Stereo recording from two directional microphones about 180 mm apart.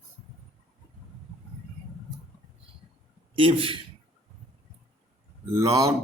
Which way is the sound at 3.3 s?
30° right (ahead or behind).